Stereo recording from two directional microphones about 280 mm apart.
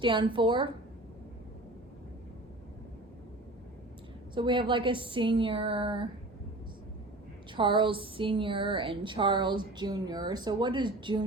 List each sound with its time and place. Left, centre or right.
0.0 s a woman's voice: centre
4.4 s a woman's voice: centre
7.5 s a woman's voice: centre